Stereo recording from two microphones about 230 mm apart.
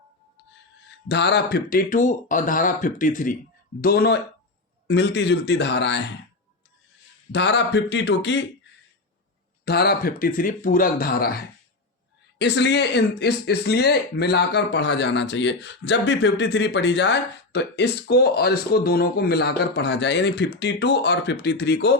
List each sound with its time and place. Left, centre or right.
1.0 s speech: left
7.3 s speech: left
9.6 s speech: left